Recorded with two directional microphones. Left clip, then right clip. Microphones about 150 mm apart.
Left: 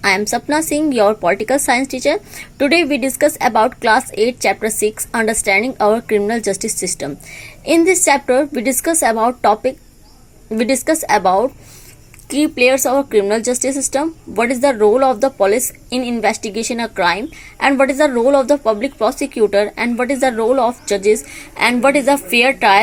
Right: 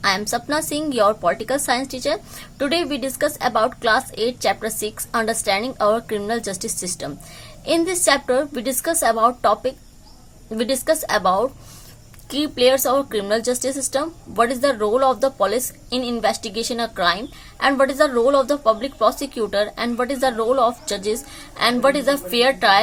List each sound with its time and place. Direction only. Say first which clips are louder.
0.0 s a woman's voice: left 5 dB; 35° left (ahead or behind)
12.6 s a woman's voice: left 2 dB; 30° left (ahead or behind)